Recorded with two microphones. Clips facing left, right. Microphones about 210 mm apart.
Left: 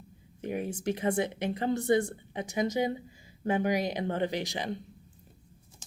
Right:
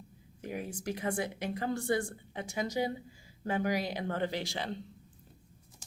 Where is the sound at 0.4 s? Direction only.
25° left (ahead or behind).